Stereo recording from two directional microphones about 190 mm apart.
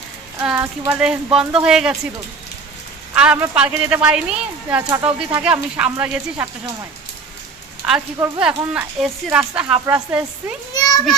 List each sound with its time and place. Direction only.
0.3 s speech: 10° right (ahead or behind)
3.2 s speech: 5° right (ahead or behind)
5.0 s speech: 5° right (ahead or behind)
8.4 s speech: 5° right (ahead or behind)
10.8 s a sound: 20° left (ahead or behind)